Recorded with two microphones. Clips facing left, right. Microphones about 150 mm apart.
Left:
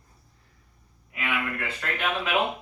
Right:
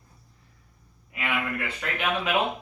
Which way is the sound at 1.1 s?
10° right (ahead or behind).